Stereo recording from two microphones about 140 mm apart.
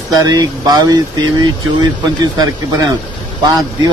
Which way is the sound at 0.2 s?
30° right (ahead or behind).